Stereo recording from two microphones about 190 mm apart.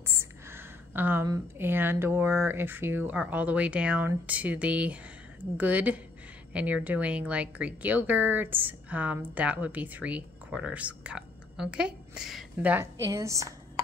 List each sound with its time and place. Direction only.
0.0 s a woman's voice: 15° right (ahead or behind)
13.0 s speech: 15° right (ahead or behind)